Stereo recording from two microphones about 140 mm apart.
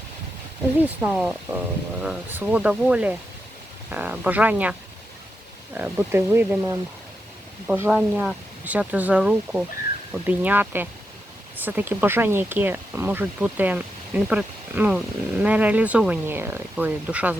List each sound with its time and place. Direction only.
0.8 s speech: 10° right (ahead or behind)
5.7 s speech: 15° right (ahead or behind)
7.7 s speech: 5° right (ahead or behind)